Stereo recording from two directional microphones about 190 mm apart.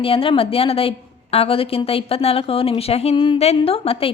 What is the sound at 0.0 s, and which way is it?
A woman's voice, 30° left (ahead or behind).